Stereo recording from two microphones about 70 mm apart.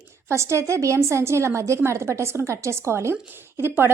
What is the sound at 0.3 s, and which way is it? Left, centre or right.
A woman's voice, right.